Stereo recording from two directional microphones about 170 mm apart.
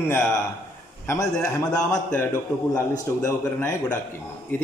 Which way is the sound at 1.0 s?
15° left (ahead or behind).